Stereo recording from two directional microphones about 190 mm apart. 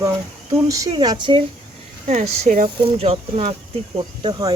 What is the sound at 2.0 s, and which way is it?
Speech, 35° right (ahead or behind).